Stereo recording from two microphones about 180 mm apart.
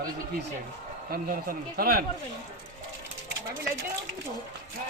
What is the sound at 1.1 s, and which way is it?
Speech, 50° right (ahead or behind).